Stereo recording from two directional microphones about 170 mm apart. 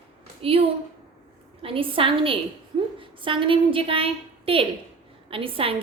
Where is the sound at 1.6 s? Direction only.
30° right (ahead or behind).